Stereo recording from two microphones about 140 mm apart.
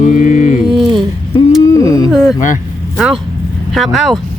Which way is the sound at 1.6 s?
25° left (ahead or behind).